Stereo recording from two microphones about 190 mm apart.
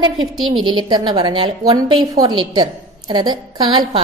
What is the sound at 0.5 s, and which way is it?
A woman's voice, 25° right (ahead or behind).